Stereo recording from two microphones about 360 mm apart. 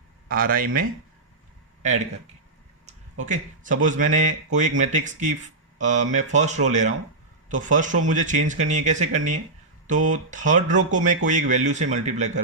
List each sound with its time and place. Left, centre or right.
0.3 s speech: right
2.8 s speech: right